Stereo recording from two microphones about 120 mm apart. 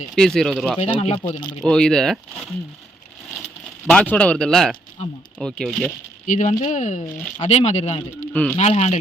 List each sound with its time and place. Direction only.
0.2 s speech: 5° left (ahead or behind)
0.8 s speech: 55° left (ahead or behind)
1.6 s speech: 5° left (ahead or behind)
3.8 s speech: 10° left (ahead or behind)
6.2 s speech: 90° left
7.4 s speech: 65° left (ahead or behind)
8.3 s speech: 10° left (ahead or behind)
8.5 s speech: 65° left (ahead or behind)